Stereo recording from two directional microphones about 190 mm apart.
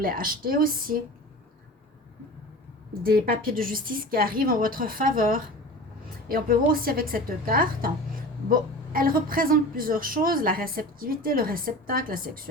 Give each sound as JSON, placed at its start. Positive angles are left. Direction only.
{"t": 0.0, "sound": "a woman's voice", "side_deg": -50}
{"t": 3.0, "sound": "a woman's voice", "side_deg": -50}